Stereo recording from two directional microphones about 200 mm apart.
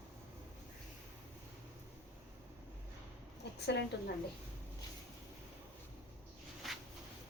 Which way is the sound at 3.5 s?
55° left (ahead or behind).